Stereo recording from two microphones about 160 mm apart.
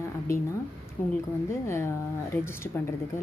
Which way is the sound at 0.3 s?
15° left (ahead or behind).